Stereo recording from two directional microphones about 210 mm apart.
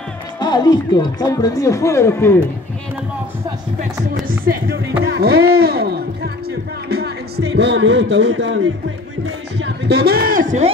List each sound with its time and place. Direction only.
0.4 s speech: 20° left (ahead or behind)
4.1 s a man's voice: 45° right (ahead or behind)